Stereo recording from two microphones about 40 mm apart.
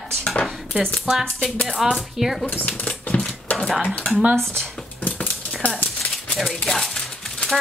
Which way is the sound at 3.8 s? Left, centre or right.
Left.